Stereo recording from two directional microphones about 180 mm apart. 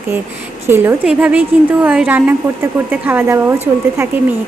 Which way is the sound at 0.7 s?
10° right (ahead or behind).